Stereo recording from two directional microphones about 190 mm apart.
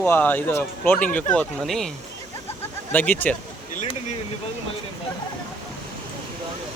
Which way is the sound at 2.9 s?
10° left (ahead or behind).